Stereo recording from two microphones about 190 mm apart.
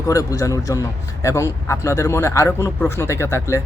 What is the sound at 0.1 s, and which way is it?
A man's voice, 15° left (ahead or behind).